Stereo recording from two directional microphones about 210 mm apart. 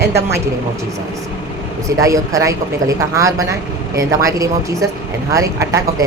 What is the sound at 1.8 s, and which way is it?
Speech, 15° right (ahead or behind).